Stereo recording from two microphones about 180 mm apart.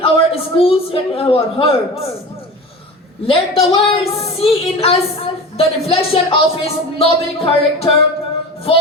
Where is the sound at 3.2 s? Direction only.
30° left (ahead or behind).